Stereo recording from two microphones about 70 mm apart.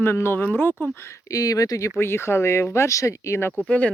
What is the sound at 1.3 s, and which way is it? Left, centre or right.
Speech, left.